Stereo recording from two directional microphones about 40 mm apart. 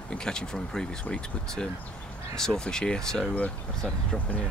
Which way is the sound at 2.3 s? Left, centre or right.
Centre.